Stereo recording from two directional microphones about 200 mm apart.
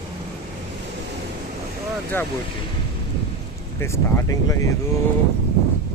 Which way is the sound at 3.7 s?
15° left (ahead or behind).